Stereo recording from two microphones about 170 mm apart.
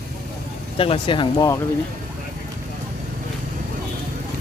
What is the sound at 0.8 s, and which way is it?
Speech, 30° left (ahead or behind).